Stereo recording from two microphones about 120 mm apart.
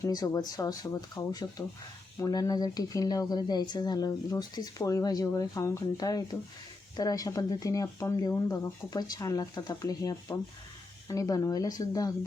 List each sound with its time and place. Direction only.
0.0 s speech: 30° left (ahead or behind)